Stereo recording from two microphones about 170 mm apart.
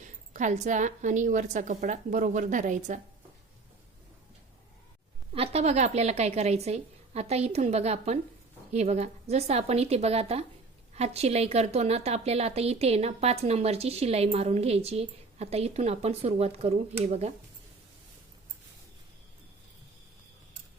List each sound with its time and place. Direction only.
0.0 s a woman's voice: 45° right (ahead or behind)
5.3 s a woman's voice: 35° right (ahead or behind)